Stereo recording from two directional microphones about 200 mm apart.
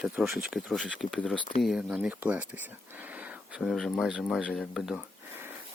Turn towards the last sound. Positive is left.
turn(degrees=-5)  # may be behind; listen again after turning